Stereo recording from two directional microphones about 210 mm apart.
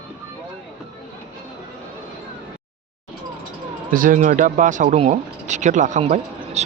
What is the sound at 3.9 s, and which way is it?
Speech, 40° right (ahead or behind).